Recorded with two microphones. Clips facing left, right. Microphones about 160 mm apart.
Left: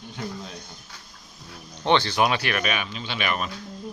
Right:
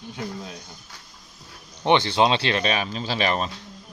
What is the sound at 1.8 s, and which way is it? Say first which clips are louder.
Speech: right 2 dB; 20° right (ahead or behind).